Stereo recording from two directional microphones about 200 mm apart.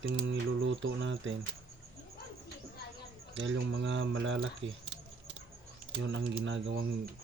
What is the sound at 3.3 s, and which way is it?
Speech, 70° right (ahead or behind).